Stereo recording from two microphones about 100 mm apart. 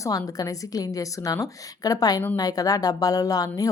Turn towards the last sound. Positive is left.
turn(degrees=35)  # may be behind; listen again after turning